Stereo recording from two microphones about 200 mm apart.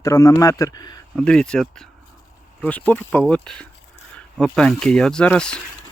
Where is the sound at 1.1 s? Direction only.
5° left (ahead or behind).